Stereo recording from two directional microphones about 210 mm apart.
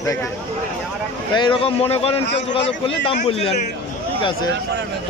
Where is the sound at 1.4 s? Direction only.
25° left (ahead or behind).